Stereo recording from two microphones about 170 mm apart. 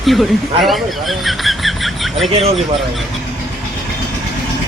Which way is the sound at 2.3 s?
35° right (ahead or behind).